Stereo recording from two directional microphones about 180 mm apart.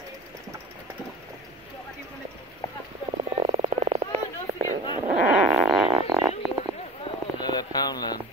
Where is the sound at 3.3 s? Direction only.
30° right (ahead or behind).